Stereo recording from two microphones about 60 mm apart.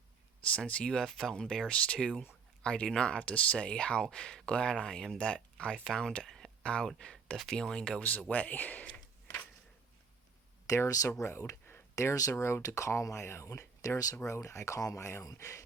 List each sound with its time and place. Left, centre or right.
0.4 s speech: left
1.0 s speech: centre
5.7 s speech: centre
6.2 s a sound: centre
6.6 s speech: centre
8.3 s a man's voice: left
10.8 s speech: left
11.1 s speech: left
12.6 s speech: left